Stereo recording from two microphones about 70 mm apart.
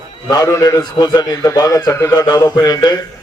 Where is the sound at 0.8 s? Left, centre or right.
Left.